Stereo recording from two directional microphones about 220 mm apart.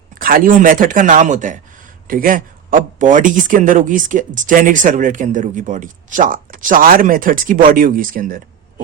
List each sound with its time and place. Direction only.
0.1 s speech: 40° right (ahead or behind)